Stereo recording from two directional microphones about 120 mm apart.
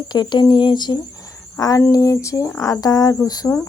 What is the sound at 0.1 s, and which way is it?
Speech, 35° left (ahead or behind).